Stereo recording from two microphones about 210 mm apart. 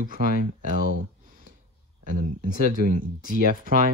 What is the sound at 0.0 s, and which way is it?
Speech, 40° right (ahead or behind).